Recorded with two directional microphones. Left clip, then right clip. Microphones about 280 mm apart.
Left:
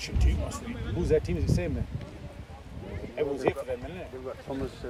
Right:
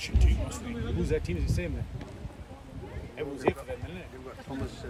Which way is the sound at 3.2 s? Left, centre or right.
Left.